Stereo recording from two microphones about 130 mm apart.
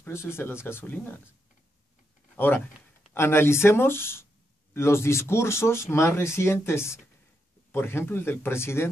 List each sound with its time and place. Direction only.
0.0 s speech: 20° left (ahead or behind)
2.3 s speech: 15° left (ahead or behind)